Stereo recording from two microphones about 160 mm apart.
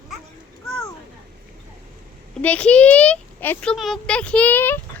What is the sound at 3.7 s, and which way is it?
A child's voice, centre (ahead or behind).